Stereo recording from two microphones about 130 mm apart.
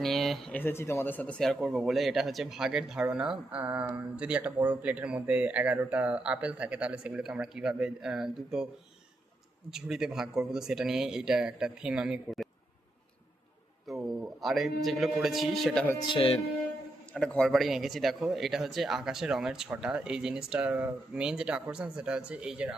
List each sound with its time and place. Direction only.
0.0 s speech: centre (ahead or behind)
0.5 s speech: 15° left (ahead or behind); by 8.6 s 5° right (ahead or behind)
9.6 s speech: 5° right (ahead or behind)
13.9 s a sound: centre (ahead or behind)
14.4 s speech: centre (ahead or behind)
16.0 s speech: 40° left (ahead or behind)
17.2 s speech: 5° left (ahead or behind)